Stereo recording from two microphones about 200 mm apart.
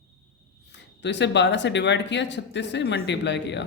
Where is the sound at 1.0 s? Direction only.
60° left (ahead or behind).